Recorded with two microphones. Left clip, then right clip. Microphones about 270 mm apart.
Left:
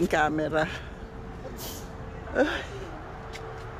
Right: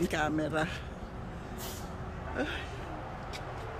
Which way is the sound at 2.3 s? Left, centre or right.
Centre.